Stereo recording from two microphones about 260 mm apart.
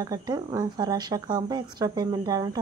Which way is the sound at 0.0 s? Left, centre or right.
Centre.